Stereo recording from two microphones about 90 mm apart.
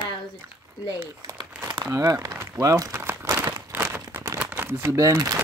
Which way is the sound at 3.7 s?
25° right (ahead or behind).